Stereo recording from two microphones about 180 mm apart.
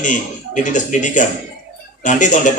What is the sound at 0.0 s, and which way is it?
A man's voice, 45° left (ahead or behind).